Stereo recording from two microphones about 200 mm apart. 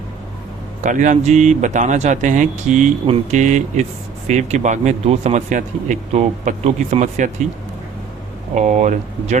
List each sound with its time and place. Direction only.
0.8 s speech: 40° right (ahead or behind)
8.5 s speech: 35° right (ahead or behind)